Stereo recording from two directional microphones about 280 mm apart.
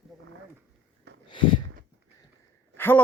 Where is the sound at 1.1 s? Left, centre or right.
Right.